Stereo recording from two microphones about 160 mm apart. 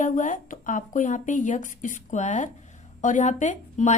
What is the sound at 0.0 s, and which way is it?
A woman's voice, 55° left (ahead or behind).